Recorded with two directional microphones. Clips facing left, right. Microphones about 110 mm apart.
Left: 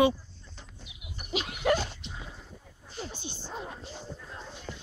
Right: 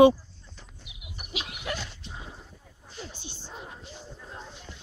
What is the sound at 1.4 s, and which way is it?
Dog, 40° left (ahead or behind).